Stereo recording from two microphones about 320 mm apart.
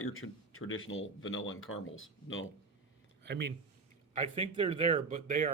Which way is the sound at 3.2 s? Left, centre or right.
Right.